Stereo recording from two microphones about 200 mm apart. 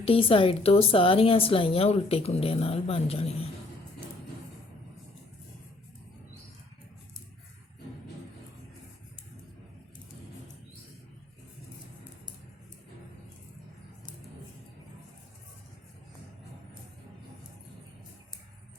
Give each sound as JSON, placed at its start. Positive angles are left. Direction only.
{"t": 0.0, "sound": "a woman's voice", "side_deg": 30}